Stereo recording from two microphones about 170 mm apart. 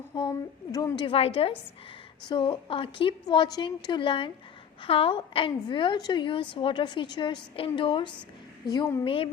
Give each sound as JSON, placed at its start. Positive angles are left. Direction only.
{"t": 0.1, "sound": "a woman's voice", "side_deg": 20}